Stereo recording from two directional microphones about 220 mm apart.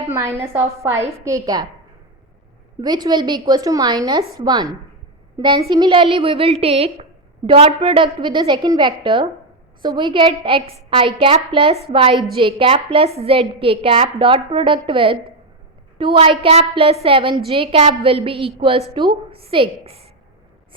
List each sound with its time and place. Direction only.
0.1 s a woman's voice: 10° right (ahead or behind)
2.8 s a woman's voice: 20° right (ahead or behind)